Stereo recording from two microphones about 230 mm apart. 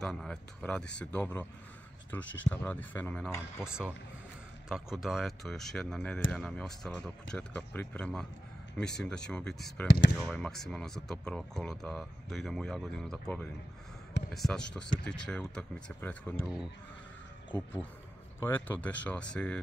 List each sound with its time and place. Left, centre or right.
0.0 s speech: centre
3.6 s speech: centre
9.8 s speech: left
10.1 s speech: centre
17.5 s speech: centre